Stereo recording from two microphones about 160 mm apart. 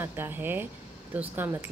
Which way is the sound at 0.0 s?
15° right (ahead or behind).